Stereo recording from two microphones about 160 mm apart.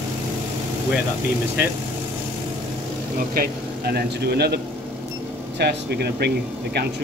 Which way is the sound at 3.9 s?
90° right.